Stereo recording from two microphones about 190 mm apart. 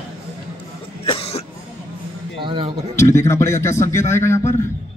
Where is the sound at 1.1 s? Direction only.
30° left (ahead or behind).